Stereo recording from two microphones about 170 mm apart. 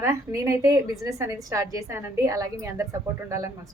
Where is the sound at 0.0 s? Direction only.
15° right (ahead or behind).